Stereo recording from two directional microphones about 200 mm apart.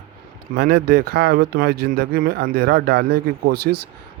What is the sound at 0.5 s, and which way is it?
Speech, 50° right (ahead or behind).